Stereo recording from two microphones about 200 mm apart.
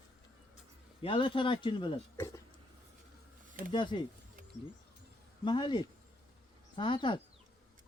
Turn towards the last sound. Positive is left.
turn(degrees=25)  # may be behind; listen again after turning